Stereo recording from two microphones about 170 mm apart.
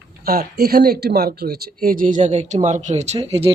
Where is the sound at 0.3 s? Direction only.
60° right (ahead or behind).